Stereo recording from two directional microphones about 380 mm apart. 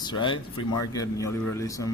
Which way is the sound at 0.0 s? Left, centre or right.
Centre.